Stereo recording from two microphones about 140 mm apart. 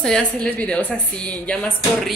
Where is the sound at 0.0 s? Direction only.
5° left (ahead or behind).